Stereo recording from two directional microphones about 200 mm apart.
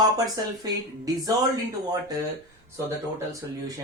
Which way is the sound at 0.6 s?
15° right (ahead or behind).